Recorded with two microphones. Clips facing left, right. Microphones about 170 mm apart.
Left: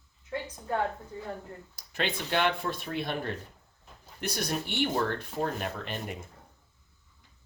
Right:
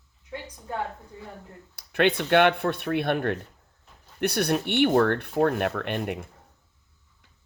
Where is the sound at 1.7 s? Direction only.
60° right (ahead or behind).